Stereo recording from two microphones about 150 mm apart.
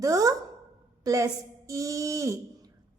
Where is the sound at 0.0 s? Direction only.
25° right (ahead or behind).